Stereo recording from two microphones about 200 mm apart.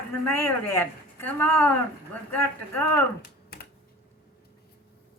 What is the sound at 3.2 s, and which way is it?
Computer keyboard, 50° left (ahead or behind).